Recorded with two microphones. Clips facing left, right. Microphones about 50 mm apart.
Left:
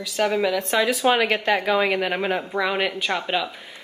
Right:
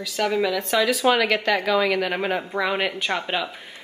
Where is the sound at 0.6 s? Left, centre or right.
Left.